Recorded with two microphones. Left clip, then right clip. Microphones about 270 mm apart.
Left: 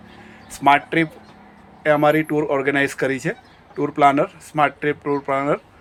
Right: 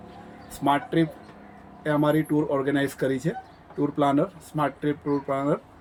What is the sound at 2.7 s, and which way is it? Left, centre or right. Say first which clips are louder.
Speech: left 6 dB; centre.